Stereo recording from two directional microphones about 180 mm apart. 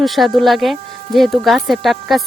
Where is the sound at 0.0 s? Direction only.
Centre (ahead or behind).